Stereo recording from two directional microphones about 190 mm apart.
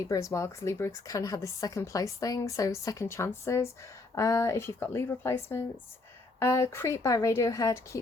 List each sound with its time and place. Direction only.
0.0 s a woman's voice: 15° left (ahead or behind)